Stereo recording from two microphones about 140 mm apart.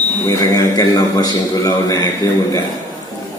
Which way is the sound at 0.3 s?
25° left (ahead or behind).